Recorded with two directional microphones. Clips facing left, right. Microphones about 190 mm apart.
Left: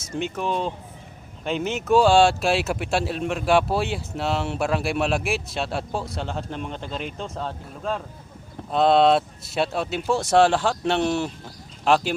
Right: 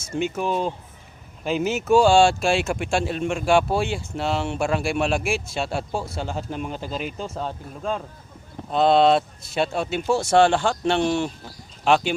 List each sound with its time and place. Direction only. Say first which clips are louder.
0.0 s speech: right 2 dB; centre (ahead or behind)